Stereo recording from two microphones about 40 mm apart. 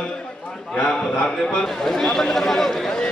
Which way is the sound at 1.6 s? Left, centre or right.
Centre.